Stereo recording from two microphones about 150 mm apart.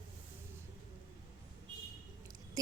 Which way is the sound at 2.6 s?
25° right (ahead or behind).